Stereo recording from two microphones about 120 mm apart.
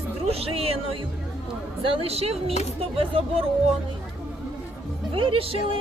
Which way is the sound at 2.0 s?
60° right (ahead or behind).